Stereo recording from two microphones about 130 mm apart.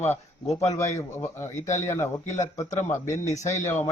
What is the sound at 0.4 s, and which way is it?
Speech, 60° left (ahead or behind).